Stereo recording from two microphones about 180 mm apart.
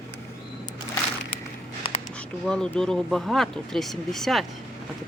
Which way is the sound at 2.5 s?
5° left (ahead or behind).